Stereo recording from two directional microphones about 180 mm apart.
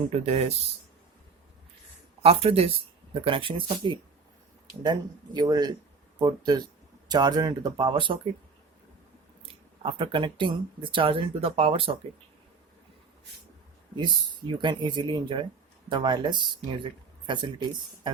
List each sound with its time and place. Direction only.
0.3 s speech: 35° right (ahead or behind)
2.2 s speech: 35° right (ahead or behind)
9.4 s speech: 30° right (ahead or behind)
13.9 s speech: 25° right (ahead or behind)